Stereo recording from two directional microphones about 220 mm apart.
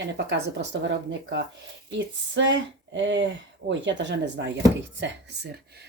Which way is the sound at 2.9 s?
55° right (ahead or behind).